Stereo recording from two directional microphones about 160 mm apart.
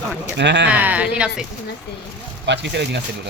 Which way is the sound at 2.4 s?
90° right.